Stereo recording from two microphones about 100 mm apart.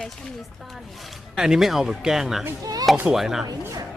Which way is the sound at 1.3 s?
5° right (ahead or behind).